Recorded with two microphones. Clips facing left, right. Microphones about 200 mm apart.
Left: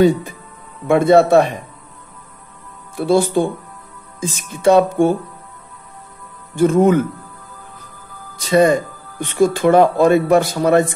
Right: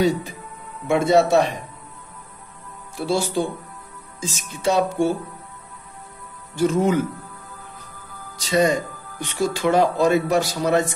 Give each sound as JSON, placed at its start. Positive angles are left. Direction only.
{"t": 0.8, "sound": "speech", "side_deg": 55}
{"t": 3.0, "sound": "speech", "side_deg": 55}
{"t": 6.5, "sound": "speech", "side_deg": 55}
{"t": 8.4, "sound": "speech", "side_deg": 55}